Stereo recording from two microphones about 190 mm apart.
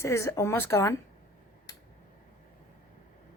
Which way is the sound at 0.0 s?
15° left (ahead or behind).